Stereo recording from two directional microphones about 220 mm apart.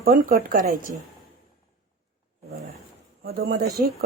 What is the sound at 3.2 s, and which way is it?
Speech, 45° right (ahead or behind).